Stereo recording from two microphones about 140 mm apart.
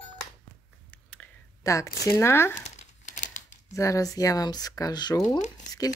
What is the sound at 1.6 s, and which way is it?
Speech, 20° left (ahead or behind).